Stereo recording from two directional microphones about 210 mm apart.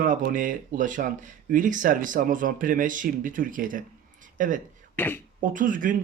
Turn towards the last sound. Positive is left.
turn(degrees=-40)  # may be behind; listen again after turning